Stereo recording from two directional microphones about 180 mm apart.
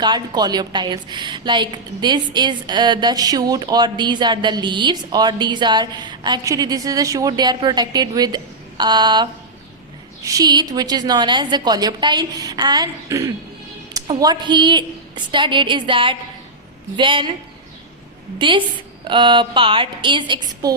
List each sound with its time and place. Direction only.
0.0 s a woman's voice: 25° right (ahead or behind)
18.3 s a woman's voice: 25° right (ahead or behind)